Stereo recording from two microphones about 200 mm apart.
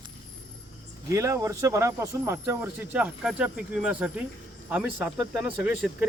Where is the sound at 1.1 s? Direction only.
15° right (ahead or behind).